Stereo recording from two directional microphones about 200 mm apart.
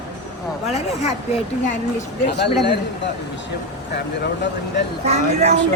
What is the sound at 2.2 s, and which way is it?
Speech, 55° left (ahead or behind).